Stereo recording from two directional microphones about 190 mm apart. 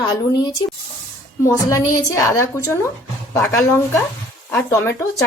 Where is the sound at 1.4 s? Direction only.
15° left (ahead or behind).